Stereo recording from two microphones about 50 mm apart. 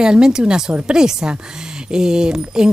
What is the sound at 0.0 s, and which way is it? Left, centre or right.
Speech, centre.